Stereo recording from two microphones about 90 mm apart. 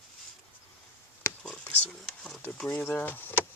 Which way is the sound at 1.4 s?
5° left (ahead or behind).